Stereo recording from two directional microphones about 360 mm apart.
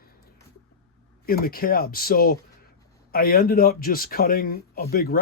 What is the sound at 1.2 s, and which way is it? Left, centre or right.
Speech, left.